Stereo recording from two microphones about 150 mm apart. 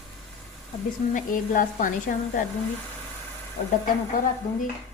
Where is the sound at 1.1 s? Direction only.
60° left (ahead or behind).